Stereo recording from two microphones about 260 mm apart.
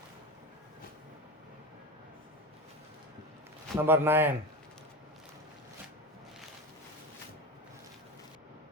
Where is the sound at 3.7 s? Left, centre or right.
Centre.